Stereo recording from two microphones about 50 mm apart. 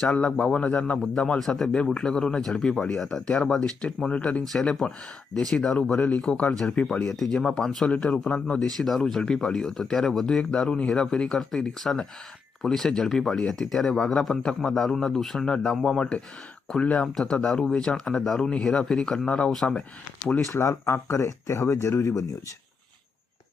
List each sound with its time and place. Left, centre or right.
0.0 s speech: centre
3.2 s speech: left; by 7.9 s centre
7.9 s speech: centre
8.8 s speech: centre
20.4 s speech: left